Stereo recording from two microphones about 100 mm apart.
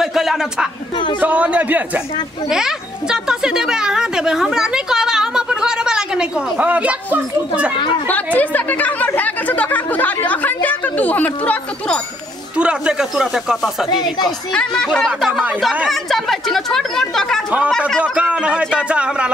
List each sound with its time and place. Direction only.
0.0 s speech: 5° right (ahead or behind)
1.2 s speech: 15° right (ahead or behind)
8.4 s chatter: 15° left (ahead or behind)
12.5 s speech: 10° right (ahead or behind)
13.8 s speech: 45° left (ahead or behind)
14.2 s speech: 10° left (ahead or behind)
18.0 s speech: 10° right (ahead or behind)